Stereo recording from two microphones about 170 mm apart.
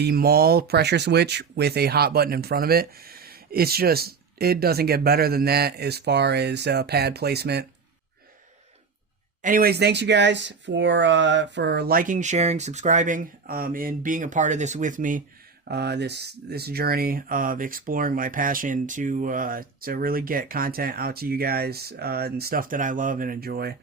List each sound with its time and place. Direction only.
0.0 s speech: 65° right (ahead or behind)
9.4 s speech: 55° right (ahead or behind)
15.7 s speech: 75° right (ahead or behind)